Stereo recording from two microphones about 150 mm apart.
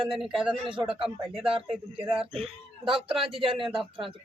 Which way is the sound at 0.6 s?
35° right (ahead or behind).